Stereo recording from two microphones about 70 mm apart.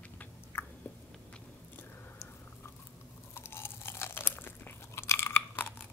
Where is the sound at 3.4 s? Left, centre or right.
Left.